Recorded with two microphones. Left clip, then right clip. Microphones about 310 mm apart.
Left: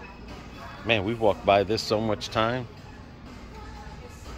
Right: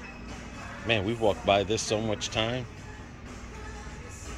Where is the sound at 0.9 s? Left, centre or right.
Centre.